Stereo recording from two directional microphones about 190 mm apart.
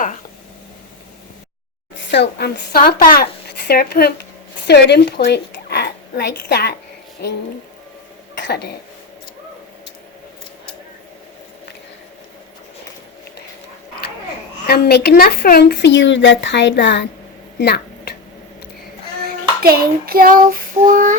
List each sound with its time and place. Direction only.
2.0 s a woman's voice: 60° left (ahead or behind)
8.4 s a woman's voice: 60° left (ahead or behind)
14.7 s speech: 60° left (ahead or behind)
17.6 s a sound: 60° left (ahead or behind)
19.6 s child singing: 55° right (ahead or behind)